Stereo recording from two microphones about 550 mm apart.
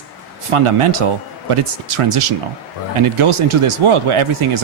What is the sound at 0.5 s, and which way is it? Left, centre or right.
Speech, right.